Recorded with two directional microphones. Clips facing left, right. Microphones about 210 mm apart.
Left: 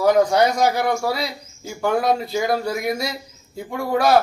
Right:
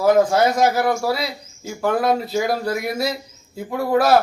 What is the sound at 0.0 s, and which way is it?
Speech, 5° right (ahead or behind).